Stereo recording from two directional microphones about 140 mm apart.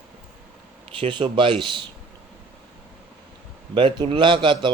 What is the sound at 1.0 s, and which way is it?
Speech, 35° right (ahead or behind).